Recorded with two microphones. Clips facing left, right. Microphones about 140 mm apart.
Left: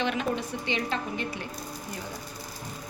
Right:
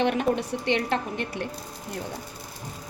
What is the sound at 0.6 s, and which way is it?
Speech, 65° right (ahead or behind).